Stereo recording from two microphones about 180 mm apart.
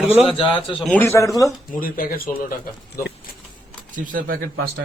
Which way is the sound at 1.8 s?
50° left (ahead or behind).